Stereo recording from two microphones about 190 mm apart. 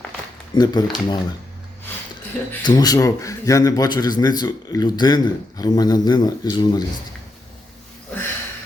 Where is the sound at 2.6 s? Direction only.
20° left (ahead or behind).